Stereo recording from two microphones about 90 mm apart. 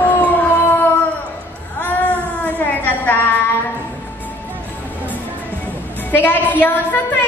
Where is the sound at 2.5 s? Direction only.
20° left (ahead or behind).